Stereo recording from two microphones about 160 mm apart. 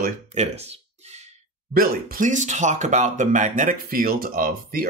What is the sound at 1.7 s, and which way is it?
Speech, 65° right (ahead or behind).